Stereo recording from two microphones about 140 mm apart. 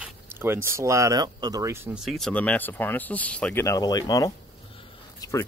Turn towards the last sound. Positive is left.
turn(degrees=20)  # may be behind; listen again after turning